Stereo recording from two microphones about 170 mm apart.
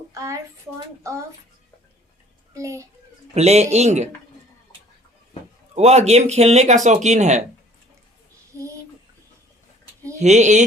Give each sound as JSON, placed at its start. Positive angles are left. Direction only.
{"t": 0.1, "sound": "a woman's voice", "side_deg": -20}
{"t": 2.6, "sound": "a child's voice", "side_deg": -15}
{"t": 3.3, "sound": "speech", "side_deg": -40}
{"t": 5.7, "sound": "speech", "side_deg": -40}
{"t": 10.2, "sound": "speech", "side_deg": -45}